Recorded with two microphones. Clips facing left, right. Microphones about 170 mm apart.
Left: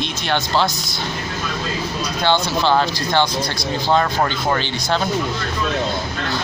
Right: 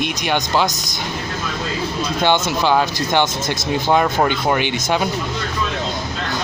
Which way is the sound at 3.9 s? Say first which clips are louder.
Right 2 dB; 10° right (ahead or behind).